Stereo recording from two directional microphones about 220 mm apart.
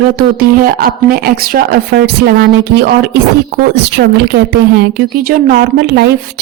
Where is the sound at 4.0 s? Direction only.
50° right (ahead or behind).